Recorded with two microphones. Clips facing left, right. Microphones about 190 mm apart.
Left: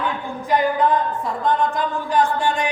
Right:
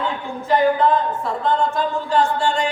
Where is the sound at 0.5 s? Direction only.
15° left (ahead or behind).